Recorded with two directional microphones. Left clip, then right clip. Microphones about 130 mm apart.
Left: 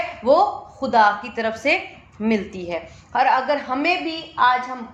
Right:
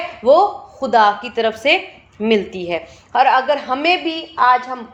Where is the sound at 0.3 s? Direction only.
40° right (ahead or behind).